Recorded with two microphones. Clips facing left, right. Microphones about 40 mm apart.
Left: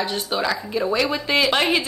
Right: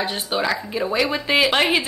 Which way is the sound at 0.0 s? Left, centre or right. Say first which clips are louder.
Even; centre.